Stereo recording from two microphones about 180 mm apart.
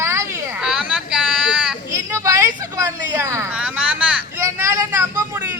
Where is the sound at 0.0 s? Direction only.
15° right (ahead or behind).